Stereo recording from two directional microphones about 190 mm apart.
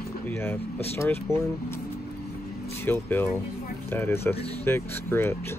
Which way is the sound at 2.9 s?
10° left (ahead or behind).